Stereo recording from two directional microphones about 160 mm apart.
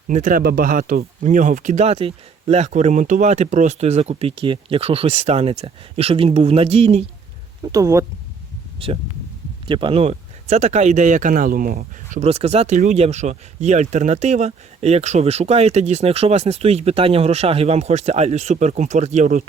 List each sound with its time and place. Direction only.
0.1 s speech: 55° right (ahead or behind)
7.6 s speech: 20° right (ahead or behind)
9.6 s speech: 30° right (ahead or behind); by 12.2 s 60° right (ahead or behind)
12.2 s speech: 40° right (ahead or behind)